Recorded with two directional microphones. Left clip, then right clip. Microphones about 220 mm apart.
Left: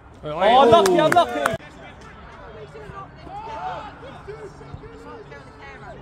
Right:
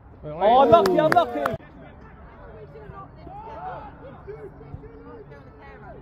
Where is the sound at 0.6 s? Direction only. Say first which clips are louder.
Left 2 dB; 40° right (ahead or behind).